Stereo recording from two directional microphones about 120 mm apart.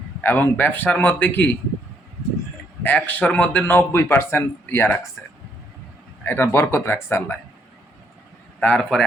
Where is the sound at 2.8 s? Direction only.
15° left (ahead or behind).